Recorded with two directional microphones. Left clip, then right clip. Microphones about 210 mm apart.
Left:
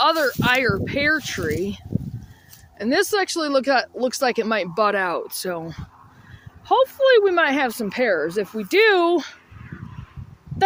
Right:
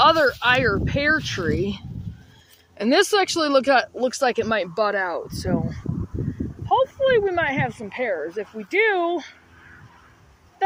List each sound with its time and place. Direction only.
0.0 s speech: centre (ahead or behind); by 9.3 s 40° left (ahead or behind)